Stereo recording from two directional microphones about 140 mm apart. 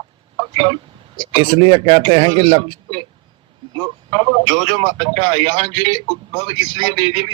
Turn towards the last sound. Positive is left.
turn(degrees=-35)  # may be behind; listen again after turning